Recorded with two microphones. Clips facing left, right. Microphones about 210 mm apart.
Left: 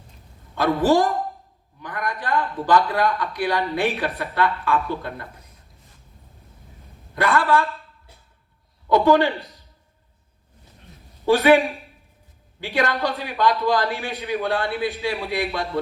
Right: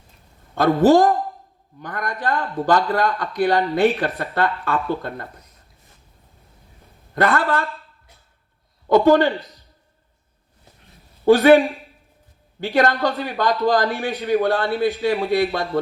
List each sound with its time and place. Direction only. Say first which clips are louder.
0.5 s a man's voice: right 4 dB; 45° right (ahead or behind)
7.2 s a man's voice: even; 45° right (ahead or behind)
8.9 s a man's voice: right 3 dB; 45° right (ahead or behind)
11.3 s a man's voice: right 4 dB; 40° right (ahead or behind)